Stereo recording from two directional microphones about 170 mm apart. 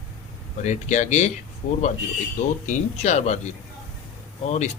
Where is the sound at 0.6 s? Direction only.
45° left (ahead or behind).